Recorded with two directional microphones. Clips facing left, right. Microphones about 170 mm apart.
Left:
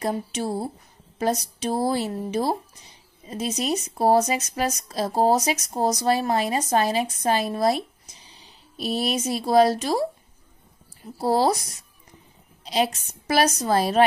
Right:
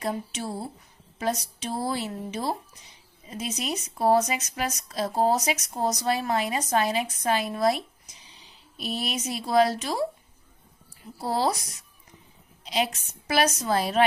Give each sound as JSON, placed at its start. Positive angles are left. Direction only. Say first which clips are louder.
{"t": 0.0, "sound": "a woman's voice", "louder": "left 4 dB", "side_deg": 40}
{"t": 11.1, "sound": "a woman's voice", "louder": "left 5 dB", "side_deg": 40}
{"t": 12.6, "sound": "a woman's voice", "louder": "left 4 dB", "side_deg": 35}